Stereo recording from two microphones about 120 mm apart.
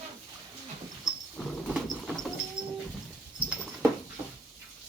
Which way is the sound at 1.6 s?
5° right (ahead or behind).